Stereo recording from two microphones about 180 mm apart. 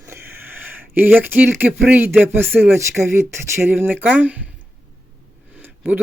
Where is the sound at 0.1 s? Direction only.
10° right (ahead or behind).